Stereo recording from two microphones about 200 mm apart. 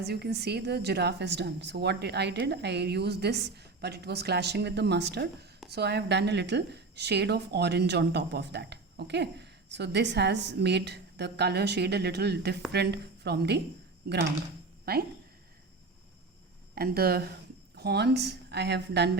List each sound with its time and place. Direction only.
0.0 s a woman's voice: 55° right (ahead or behind)
14.9 s speech: 50° right (ahead or behind)
16.7 s a woman's voice: 50° right (ahead or behind)